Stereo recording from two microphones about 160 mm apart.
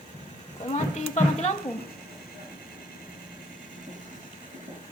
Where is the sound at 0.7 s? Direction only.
45° left (ahead or behind).